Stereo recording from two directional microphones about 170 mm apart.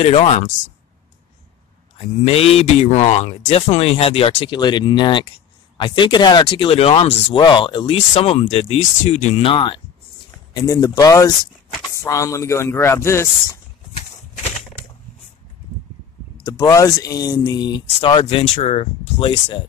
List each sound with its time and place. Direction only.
0.0 s speech: 35° left (ahead or behind)
2.0 s speech: 35° left (ahead or behind)
10.5 s speech: 20° left (ahead or behind)
16.4 s speech: 20° left (ahead or behind)